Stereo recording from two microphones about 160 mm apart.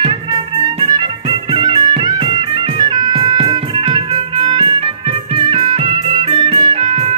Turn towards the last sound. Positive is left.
turn(degrees=-35)  # may be behind; listen again after turning